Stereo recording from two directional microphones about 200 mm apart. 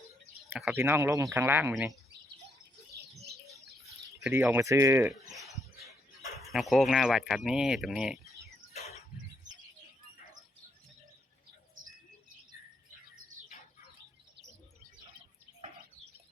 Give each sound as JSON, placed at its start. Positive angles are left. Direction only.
{"t": 0.5, "sound": "speech", "side_deg": -10}
{"t": 4.2, "sound": "speech", "side_deg": -10}
{"t": 6.5, "sound": "speech", "side_deg": 0}
{"t": 8.7, "sound": "a sound", "side_deg": 30}